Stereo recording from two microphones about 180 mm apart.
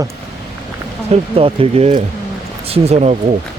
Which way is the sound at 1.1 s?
30° right (ahead or behind).